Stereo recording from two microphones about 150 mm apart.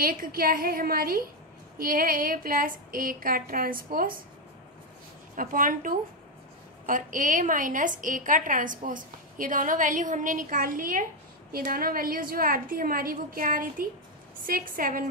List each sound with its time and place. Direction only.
0.0 s a woman's voice: 70° right (ahead or behind)
5.3 s a woman's voice: 65° right (ahead or behind)